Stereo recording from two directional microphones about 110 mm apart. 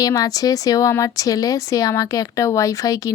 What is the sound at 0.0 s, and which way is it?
A woman's voice, 35° left (ahead or behind).